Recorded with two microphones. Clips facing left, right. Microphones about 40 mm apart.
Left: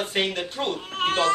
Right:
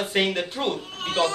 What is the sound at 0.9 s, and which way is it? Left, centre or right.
Speech, left.